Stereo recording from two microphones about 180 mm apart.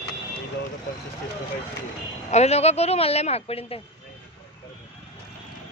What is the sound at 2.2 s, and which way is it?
Speech, 35° left (ahead or behind).